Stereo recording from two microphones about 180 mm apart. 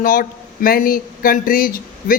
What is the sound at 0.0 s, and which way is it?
A man's voice, 50° left (ahead or behind).